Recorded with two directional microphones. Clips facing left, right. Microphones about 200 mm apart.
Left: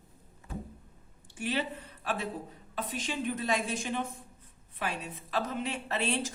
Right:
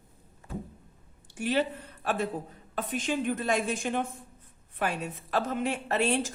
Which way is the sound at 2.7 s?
50° right (ahead or behind).